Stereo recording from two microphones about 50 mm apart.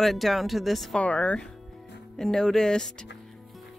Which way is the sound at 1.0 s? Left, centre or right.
Left.